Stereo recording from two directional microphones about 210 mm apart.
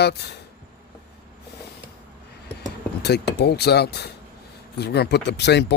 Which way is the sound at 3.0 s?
50° left (ahead or behind).